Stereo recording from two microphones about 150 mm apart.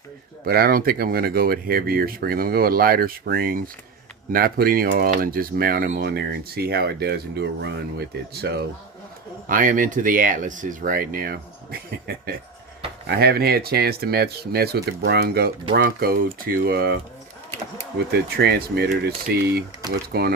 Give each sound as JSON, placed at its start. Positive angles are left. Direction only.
{"t": 0.4, "sound": "speech", "side_deg": -80}
{"t": 9.5, "sound": "speech", "side_deg": -65}
{"t": 18.1, "sound": "speech", "side_deg": -90}